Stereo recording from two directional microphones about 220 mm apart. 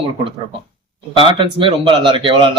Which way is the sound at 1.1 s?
25° right (ahead or behind).